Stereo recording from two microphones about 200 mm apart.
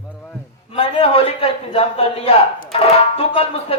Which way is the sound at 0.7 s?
30° left (ahead or behind).